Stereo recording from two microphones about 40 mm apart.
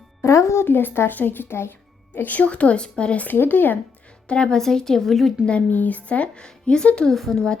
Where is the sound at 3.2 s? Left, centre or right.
Left.